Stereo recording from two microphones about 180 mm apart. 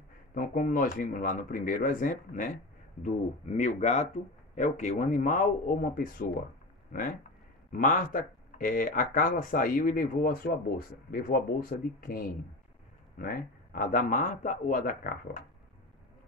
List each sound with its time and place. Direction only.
0.3 s speech: 50° left (ahead or behind)